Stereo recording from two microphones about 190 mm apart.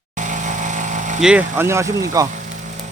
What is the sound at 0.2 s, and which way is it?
Vehicle, 40° right (ahead or behind).